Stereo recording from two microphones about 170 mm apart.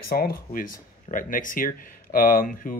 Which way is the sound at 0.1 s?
60° left (ahead or behind).